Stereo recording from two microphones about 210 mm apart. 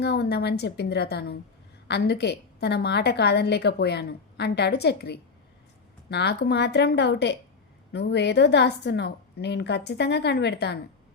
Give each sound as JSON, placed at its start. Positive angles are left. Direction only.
{"t": 0.0, "sound": "a woman's voice", "side_deg": 50}